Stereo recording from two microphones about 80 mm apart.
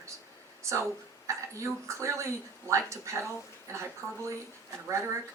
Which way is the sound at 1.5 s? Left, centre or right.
Right.